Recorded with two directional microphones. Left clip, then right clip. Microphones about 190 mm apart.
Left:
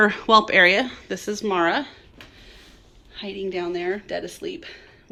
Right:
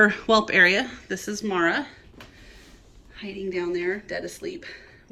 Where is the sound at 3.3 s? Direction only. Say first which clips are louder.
Left 1 dB; 30° right (ahead or behind).